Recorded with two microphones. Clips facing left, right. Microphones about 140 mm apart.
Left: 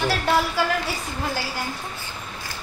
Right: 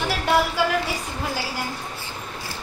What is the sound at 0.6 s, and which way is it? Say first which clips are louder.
Speech: even; 15° right (ahead or behind).